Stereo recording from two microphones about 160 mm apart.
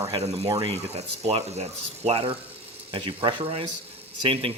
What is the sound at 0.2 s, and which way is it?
Speech, 45° right (ahead or behind).